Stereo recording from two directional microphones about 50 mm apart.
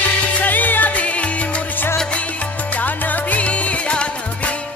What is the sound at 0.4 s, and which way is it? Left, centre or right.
Music, left.